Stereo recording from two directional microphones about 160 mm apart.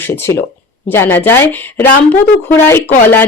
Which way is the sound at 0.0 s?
15° left (ahead or behind).